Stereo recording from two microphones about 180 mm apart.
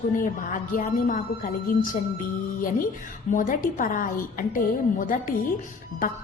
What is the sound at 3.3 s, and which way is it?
A woman's voice, 45° left (ahead or behind).